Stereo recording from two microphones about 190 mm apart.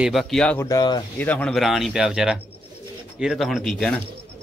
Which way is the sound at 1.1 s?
10° left (ahead or behind).